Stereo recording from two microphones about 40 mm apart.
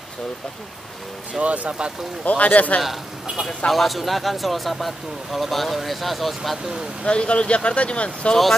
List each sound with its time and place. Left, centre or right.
1.4 s speech: right
2.2 s speech: left
2.8 s speech: centre
7.1 s speech: left